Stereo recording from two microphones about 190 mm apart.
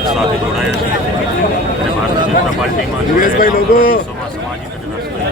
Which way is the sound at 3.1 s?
45° left (ahead or behind).